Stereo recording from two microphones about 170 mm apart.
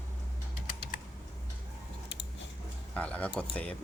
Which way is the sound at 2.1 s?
90° left.